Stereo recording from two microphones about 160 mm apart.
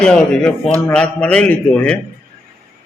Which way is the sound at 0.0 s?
5° left (ahead or behind).